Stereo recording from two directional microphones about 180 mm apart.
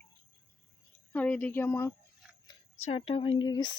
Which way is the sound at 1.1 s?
10° left (ahead or behind).